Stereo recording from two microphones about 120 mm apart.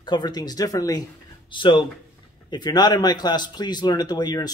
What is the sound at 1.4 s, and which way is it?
A man's voice, 40° left (ahead or behind).